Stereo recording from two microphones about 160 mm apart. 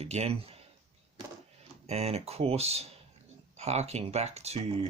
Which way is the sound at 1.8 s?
40° right (ahead or behind).